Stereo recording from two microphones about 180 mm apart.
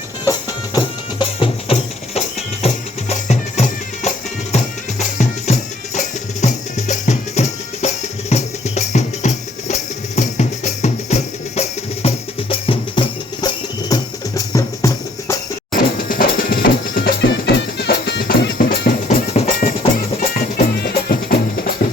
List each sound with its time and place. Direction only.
0.3 s music: 25° left (ahead or behind)
15.7 s music: 50° left (ahead or behind)